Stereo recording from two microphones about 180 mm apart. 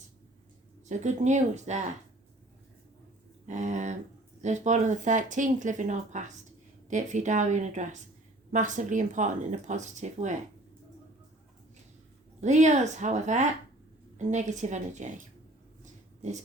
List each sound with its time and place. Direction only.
0.9 s speech: 40° right (ahead or behind)
3.4 s speech: 40° right (ahead or behind)
12.4 s speech: 40° right (ahead or behind)
15.8 s a sound: 40° right (ahead or behind)